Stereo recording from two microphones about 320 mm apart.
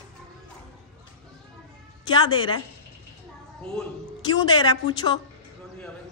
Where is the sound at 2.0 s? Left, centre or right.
Centre.